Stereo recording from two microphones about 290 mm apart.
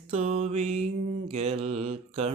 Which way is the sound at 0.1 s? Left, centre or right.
Right.